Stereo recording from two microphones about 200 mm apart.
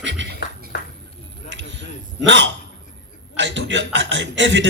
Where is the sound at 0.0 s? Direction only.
65° right (ahead or behind).